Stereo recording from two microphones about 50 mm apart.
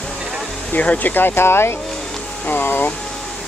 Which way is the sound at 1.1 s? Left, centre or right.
Left.